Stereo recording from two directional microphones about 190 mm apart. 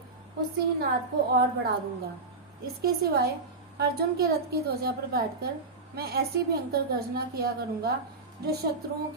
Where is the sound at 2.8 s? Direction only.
55° right (ahead or behind).